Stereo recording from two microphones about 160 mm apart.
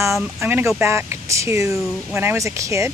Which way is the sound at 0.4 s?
15° right (ahead or behind).